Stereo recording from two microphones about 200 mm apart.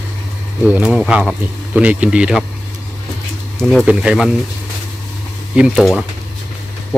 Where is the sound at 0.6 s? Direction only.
5° right (ahead or behind).